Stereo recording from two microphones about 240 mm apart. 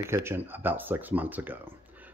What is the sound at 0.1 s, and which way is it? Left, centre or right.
Speech, centre.